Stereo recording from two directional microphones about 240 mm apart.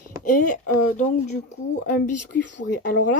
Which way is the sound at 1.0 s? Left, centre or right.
Left.